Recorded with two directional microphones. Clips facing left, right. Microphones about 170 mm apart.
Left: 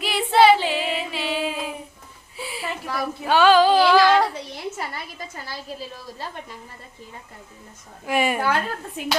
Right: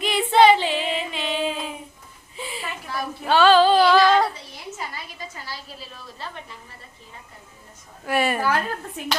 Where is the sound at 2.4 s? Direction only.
10° left (ahead or behind).